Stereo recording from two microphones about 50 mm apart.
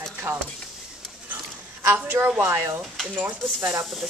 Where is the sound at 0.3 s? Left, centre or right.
Right.